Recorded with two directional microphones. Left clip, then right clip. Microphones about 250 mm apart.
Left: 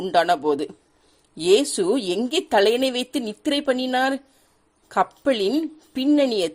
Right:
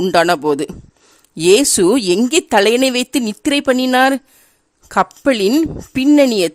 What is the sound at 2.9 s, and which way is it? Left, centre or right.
Speech, right.